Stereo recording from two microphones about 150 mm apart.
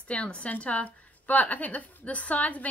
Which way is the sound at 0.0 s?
10° left (ahead or behind).